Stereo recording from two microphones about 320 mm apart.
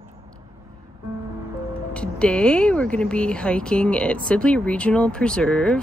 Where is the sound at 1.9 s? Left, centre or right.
Centre.